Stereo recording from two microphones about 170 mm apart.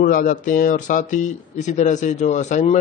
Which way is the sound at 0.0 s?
55° left (ahead or behind).